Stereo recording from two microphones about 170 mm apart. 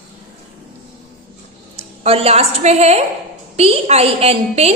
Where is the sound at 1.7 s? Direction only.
35° right (ahead or behind).